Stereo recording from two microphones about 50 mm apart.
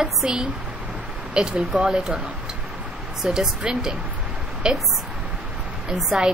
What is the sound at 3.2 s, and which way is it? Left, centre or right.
A woman's voice, centre.